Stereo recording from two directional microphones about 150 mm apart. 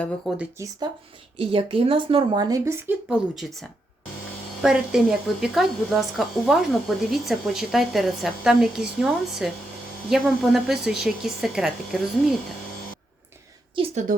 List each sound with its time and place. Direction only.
0.3 s a woman's voice: centre (ahead or behind)
1.4 s speech: 40° right (ahead or behind); by 3.2 s 15° right (ahead or behind)
3.3 s a woman's voice: centre (ahead or behind)
13.8 s speech: 35° right (ahead or behind)